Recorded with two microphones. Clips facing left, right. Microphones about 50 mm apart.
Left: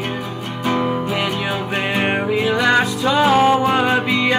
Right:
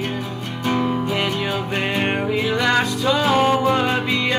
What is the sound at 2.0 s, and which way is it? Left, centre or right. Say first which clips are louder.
Music: left 3 dB; centre.